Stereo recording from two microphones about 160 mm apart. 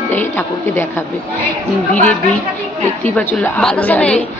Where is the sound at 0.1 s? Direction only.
15° left (ahead or behind).